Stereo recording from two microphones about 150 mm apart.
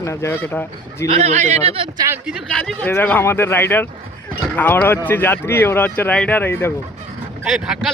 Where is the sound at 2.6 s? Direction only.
10° left (ahead or behind).